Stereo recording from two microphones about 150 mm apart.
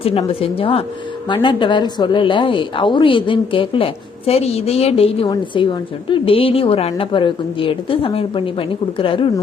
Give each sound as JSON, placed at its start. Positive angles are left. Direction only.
{"t": 0.0, "sound": "a woman's voice", "side_deg": 40}